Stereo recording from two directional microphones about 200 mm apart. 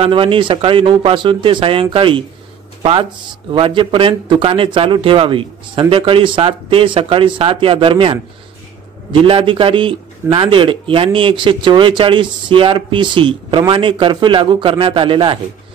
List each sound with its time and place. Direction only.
0.0 s speech: 25° right (ahead or behind)
9.2 s speech: 25° right (ahead or behind)